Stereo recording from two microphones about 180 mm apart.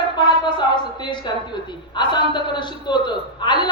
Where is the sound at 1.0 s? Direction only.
25° left (ahead or behind).